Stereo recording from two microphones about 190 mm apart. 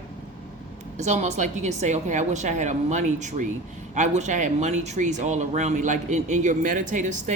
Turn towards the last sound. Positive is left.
turn(degrees=-40)  # may be behind; listen again after turning